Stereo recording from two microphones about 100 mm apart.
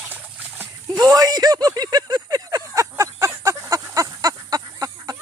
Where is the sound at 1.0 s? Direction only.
40° right (ahead or behind).